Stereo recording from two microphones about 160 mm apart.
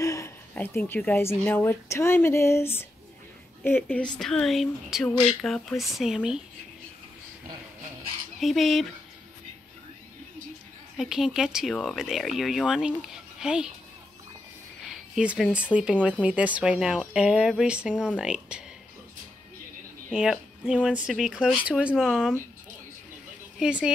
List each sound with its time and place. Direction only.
0.0 s a sound: 20° left (ahead or behind)
1.4 s speech: 15° left (ahead or behind); by 6.4 s 5° right (ahead or behind)
8.4 s speech: centre (ahead or behind)
11.0 s speech: 5° right (ahead or behind)
14.8 s speech: 5° right (ahead or behind)
20.1 s speech: 5° right (ahead or behind)
23.6 s speech: 5° right (ahead or behind)